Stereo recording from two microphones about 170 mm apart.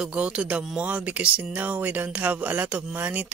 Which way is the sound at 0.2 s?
10° right (ahead or behind).